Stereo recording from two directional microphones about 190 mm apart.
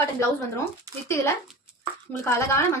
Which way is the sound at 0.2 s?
15° left (ahead or behind).